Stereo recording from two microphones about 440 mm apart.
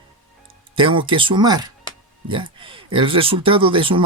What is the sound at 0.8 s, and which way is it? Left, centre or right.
Speech, centre.